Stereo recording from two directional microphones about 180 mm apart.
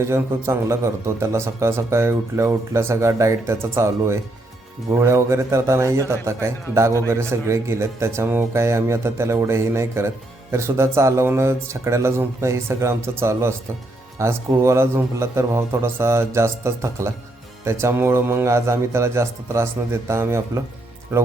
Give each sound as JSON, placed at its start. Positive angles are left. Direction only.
{"t": 0.0, "sound": "a man's voice", "side_deg": -15}